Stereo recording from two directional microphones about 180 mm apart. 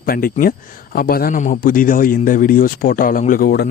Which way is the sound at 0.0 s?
55° left (ahead or behind).